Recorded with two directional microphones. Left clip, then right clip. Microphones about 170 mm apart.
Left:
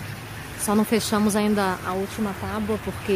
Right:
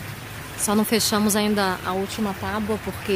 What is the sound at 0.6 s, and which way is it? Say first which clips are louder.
Speech: right 1 dB; centre (ahead or behind).